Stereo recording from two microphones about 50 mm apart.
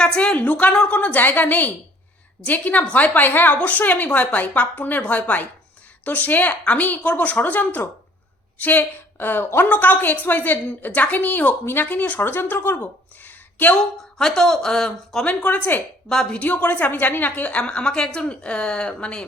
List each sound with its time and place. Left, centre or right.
0.0 s a woman's voice: centre; by 8.8 s left
8.8 s speech: left
9.6 s a woman's voice: left
11.6 s speech: left
11.9 s a woman's voice: left
12.2 s speech: left
13.2 s a sound: left
13.7 s speech: centre
15.3 s a woman's voice: left
16.0 s speech: centre
16.3 s a woman's voice: left